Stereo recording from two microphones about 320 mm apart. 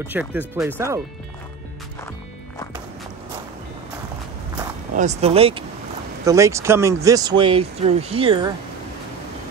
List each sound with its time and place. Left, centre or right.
0.0 s speech: centre
4.9 s speech: right